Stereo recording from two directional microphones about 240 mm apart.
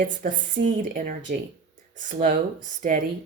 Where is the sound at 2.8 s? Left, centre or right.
Right.